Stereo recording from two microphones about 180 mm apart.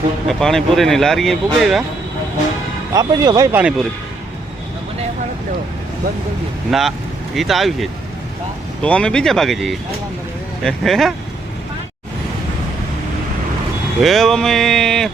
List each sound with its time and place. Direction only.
0.3 s speech: centre (ahead or behind)
2.9 s speech: 20° right (ahead or behind)
3.6 s speech: 5° right (ahead or behind)
6.7 s speech: centre (ahead or behind)
14.0 s speech: centre (ahead or behind)